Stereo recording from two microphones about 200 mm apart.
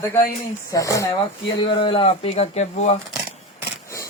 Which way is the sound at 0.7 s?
15° left (ahead or behind).